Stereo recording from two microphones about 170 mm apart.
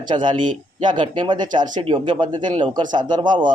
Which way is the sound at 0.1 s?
25° right (ahead or behind).